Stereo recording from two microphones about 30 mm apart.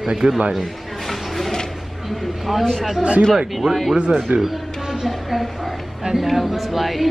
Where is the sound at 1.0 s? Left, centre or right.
Centre.